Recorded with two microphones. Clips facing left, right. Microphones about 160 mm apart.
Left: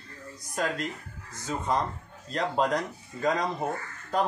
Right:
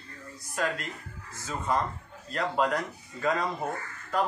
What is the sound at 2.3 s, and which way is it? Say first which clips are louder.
Speech: left 1 dB; 35° left (ahead or behind).